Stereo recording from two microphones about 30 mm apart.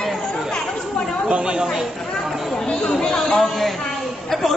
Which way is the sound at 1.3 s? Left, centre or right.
Right.